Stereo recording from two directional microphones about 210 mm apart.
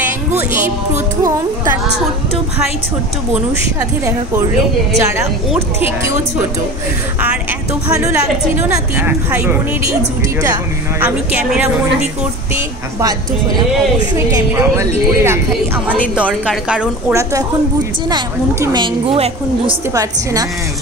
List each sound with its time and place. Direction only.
5.5 s a woman's voice: 10° right (ahead or behind)
8.1 s a woman's voice: 10° right (ahead or behind)
14.1 s a woman's voice: 15° right (ahead or behind)
16.4 s a woman's voice: 5° right (ahead or behind); by 19.7 s 30° right (ahead or behind)
19.9 s a woman's voice: 15° right (ahead or behind)